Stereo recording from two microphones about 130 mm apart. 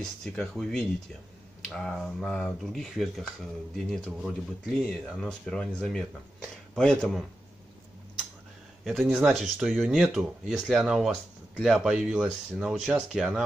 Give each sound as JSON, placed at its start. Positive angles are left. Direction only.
{"t": 0.0, "sound": "speech", "side_deg": 5}
{"t": 8.8, "sound": "speech", "side_deg": 0}